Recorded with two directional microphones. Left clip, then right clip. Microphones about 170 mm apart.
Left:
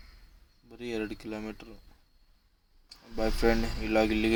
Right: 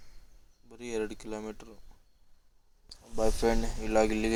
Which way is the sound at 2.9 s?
10° right (ahead or behind).